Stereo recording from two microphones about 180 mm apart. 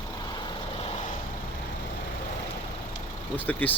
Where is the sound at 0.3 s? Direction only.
30° left (ahead or behind).